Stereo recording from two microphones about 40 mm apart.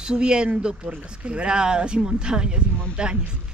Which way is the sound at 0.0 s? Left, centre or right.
Right.